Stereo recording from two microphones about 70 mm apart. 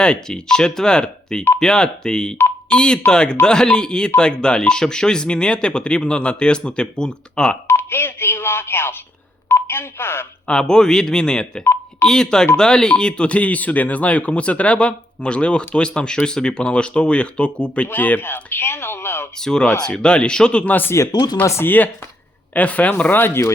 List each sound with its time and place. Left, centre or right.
0.0 s speech: centre
7.7 s speech: left
10.4 s speech: centre
11.6 s telephone dialing: left
12.0 s speech: centre; by 19.3 s left
19.4 s speech: centre
21.1 s speech: left
21.6 s speech: left